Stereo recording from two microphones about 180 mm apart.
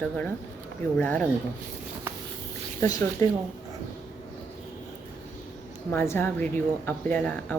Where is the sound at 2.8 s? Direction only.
15° left (ahead or behind).